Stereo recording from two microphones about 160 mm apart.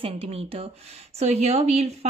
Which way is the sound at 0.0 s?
40° right (ahead or behind).